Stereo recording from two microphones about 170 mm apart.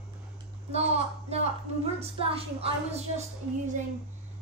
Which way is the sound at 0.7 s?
40° right (ahead or behind).